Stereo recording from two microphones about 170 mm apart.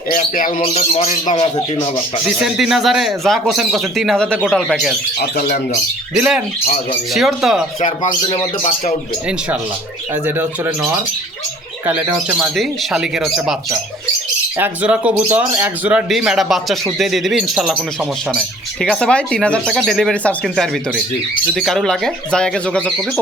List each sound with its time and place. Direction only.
0.1 s bird: 55° left (ahead or behind)
0.6 s speech: 40° left (ahead or behind)
2.4 s speech: centre (ahead or behind)
5.4 s bird: 55° left (ahead or behind)
6.1 s speech: 5° right (ahead or behind)
7.8 s speech: 35° left (ahead or behind)
10.2 s speech: 10° right (ahead or behind)
11.9 s speech: 10° right (ahead or behind)
14.6 s speech: 10° right (ahead or behind)